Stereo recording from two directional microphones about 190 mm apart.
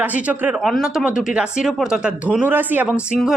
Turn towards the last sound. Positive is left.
turn(degrees=0)  # may be behind; listen again after turning